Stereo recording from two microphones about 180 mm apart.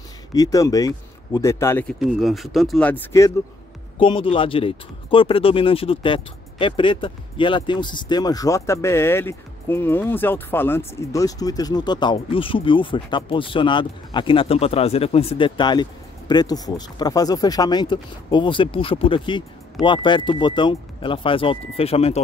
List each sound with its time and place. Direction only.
0.3 s speech: 20° left (ahead or behind)
2.0 s speech: centre (ahead or behind); by 3.3 s 15° left (ahead or behind)
4.0 s speech: 30° left (ahead or behind)